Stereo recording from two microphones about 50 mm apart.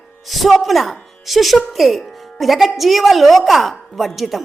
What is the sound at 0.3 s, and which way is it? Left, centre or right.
A woman's voice, centre.